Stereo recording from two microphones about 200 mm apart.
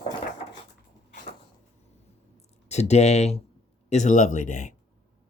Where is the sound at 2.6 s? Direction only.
35° left (ahead or behind).